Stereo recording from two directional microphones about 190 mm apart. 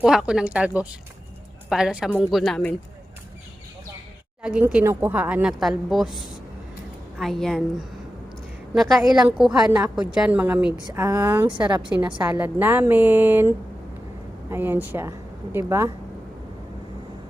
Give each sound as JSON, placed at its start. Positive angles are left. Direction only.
{"t": 0.0, "sound": "a woman's voice", "side_deg": -5}
{"t": 4.4, "sound": "a woman's voice", "side_deg": -5}
{"t": 11.4, "sound": "a woman's voice", "side_deg": -25}
{"t": 11.8, "sound": "speech", "side_deg": -10}
{"t": 14.5, "sound": "speech", "side_deg": -10}